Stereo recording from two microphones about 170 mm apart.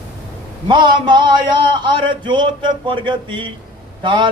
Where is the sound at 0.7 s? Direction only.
25° right (ahead or behind).